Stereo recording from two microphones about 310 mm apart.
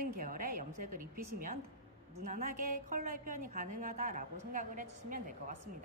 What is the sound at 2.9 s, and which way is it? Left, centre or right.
A woman's voice, right.